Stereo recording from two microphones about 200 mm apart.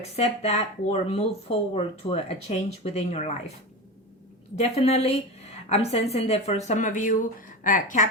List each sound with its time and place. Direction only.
0.2 s speech: 35° left (ahead or behind)
4.5 s speech: 30° left (ahead or behind)